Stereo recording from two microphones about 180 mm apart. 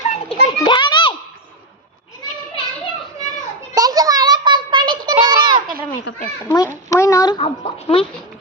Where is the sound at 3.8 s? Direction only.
20° right (ahead or behind).